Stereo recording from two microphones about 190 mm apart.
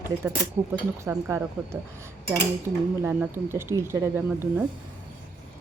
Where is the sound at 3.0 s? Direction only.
10° right (ahead or behind).